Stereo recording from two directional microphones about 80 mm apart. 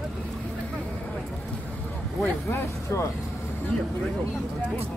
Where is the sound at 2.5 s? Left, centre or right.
Left.